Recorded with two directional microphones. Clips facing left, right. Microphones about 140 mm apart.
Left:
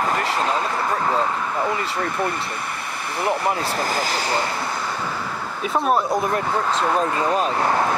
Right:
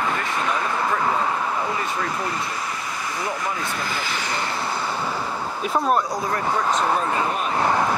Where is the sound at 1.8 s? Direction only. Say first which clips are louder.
Left 2 dB; 65° left (ahead or behind).